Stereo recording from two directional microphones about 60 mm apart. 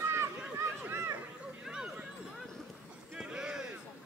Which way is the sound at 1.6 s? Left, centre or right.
Centre.